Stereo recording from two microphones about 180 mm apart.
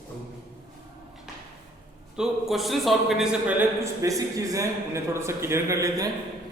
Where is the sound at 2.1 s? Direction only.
Centre (ahead or behind).